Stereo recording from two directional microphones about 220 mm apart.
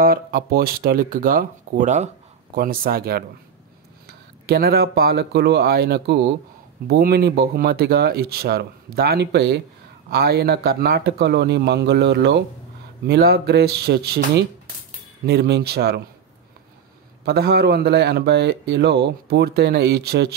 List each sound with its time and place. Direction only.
0.0 s a man's voice: 40° right (ahead or behind)
17.2 s a man's voice: 45° right (ahead or behind)